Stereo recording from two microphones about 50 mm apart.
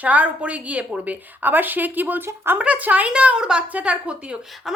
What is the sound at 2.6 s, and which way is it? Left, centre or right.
A woman's voice, right.